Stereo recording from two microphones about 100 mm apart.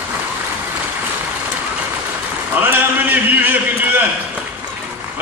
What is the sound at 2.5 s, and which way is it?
A man's voice, 20° right (ahead or behind).